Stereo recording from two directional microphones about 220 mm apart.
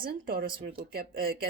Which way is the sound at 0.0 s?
45° right (ahead or behind).